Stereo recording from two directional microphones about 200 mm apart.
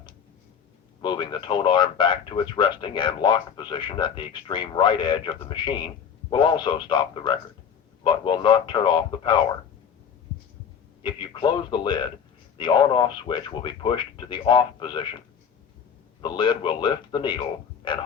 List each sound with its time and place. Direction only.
1.0 s speech: 20° left (ahead or behind)
11.0 s speech: 25° left (ahead or behind)
16.2 s speech: 20° left (ahead or behind)